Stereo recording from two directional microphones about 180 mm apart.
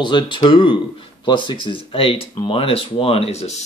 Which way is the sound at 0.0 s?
25° left (ahead or behind).